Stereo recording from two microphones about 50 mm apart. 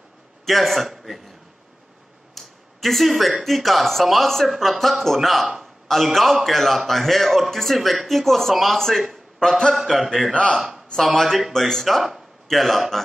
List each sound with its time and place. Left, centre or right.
0.5 s a man's voice: centre
2.3 s a man's voice: centre
9.8 s a man's voice: centre